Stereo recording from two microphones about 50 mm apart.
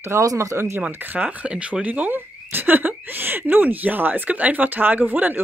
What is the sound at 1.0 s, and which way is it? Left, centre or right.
Speech, right.